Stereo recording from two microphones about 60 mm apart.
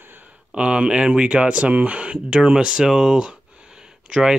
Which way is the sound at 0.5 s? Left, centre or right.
Centre.